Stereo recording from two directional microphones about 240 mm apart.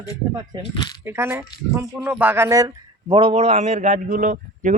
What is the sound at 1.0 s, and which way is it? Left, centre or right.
A man's voice, centre.